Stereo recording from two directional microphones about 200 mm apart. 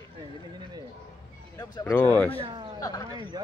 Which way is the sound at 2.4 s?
25° right (ahead or behind).